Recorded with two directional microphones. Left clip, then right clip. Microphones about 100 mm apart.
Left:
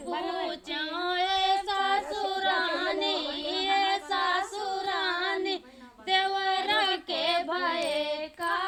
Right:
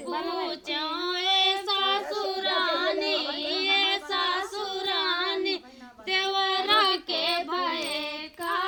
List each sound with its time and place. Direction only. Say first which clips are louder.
0.1 s child singing: right 1 dB; 20° right (ahead or behind)
0.7 s female singing: right 2 dB; 25° left (ahead or behind)
2.6 s singing: right 3 dB; 20° left (ahead or behind)
4.1 s child singing: even; 25° left (ahead or behind)